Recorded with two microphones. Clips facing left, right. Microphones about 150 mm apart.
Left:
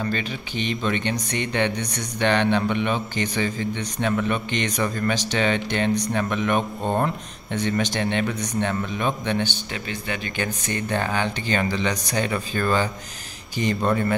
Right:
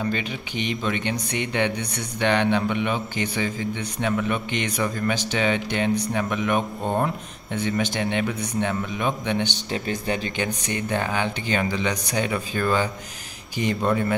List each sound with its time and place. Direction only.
0.0 s speech: 15° right (ahead or behind)
9.7 s speech: 35° right (ahead or behind)
10.3 s speech: 15° right (ahead or behind)